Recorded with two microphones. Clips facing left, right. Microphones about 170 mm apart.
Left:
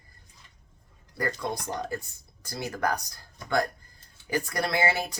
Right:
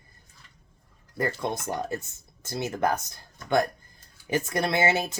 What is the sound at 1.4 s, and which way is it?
Speech, 25° right (ahead or behind).